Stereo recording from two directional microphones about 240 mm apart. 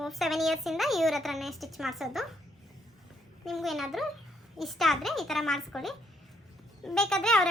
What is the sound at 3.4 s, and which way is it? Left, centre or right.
A woman's voice, centre.